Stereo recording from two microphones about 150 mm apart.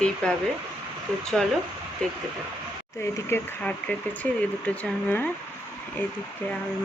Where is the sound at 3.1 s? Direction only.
15° left (ahead or behind).